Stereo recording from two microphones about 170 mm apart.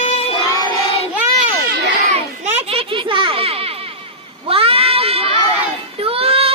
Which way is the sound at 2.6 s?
30° right (ahead or behind).